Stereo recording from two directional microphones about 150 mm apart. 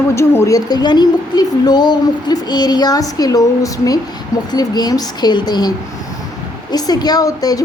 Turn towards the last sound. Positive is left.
turn(degrees=25)  # may be behind; listen again after turning